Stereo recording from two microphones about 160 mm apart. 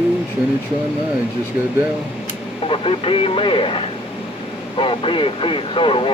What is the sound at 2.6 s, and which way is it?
Speech, 35° left (ahead or behind).